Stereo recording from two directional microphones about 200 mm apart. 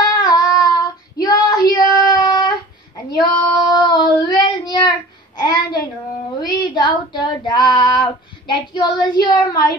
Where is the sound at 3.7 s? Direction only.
20° left (ahead or behind).